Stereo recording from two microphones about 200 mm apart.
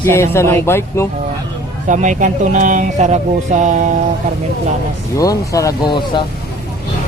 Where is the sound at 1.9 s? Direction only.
40° right (ahead or behind).